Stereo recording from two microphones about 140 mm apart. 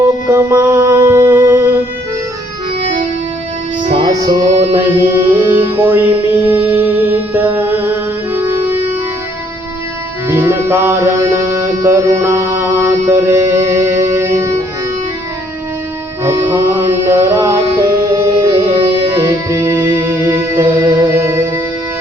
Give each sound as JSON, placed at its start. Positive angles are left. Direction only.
{"t": 0.3, "sound": "music", "side_deg": -15}
{"t": 3.8, "sound": "music", "side_deg": -40}
{"t": 4.7, "sound": "music", "side_deg": -15}
{"t": 10.2, "sound": "music", "side_deg": -20}
{"t": 16.2, "sound": "music", "side_deg": -20}